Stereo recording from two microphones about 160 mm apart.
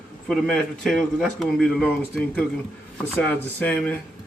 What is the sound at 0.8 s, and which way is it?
Speech, 5° left (ahead or behind).